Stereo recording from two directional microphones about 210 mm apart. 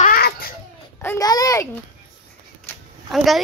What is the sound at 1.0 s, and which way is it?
Speech, 15° left (ahead or behind).